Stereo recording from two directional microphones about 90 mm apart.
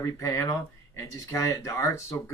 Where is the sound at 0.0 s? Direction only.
35° left (ahead or behind).